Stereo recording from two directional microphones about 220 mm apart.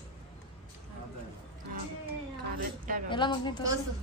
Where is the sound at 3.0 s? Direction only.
20° left (ahead or behind).